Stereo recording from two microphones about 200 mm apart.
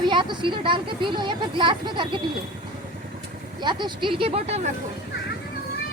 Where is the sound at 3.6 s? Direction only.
20° right (ahead or behind).